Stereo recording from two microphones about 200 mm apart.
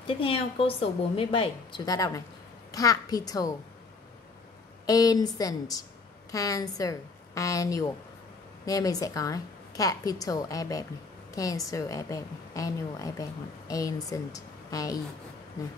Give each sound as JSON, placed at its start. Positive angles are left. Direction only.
{"t": 0.0, "sound": "a woman's voice", "side_deg": 25}
{"t": 4.8, "sound": "a woman's voice", "side_deg": 20}